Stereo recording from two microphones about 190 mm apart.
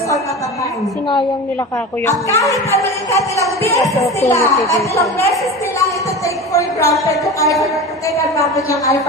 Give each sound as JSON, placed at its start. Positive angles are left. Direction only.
{"t": 2.0, "sound": "speech", "side_deg": 15}
{"t": 5.8, "sound": "a sound", "side_deg": 15}
{"t": 8.2, "sound": "speech", "side_deg": 15}